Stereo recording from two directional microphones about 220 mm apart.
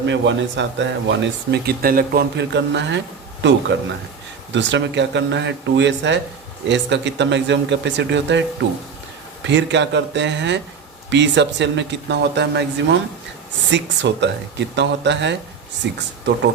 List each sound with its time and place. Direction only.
0.0 s speech: 55° right (ahead or behind)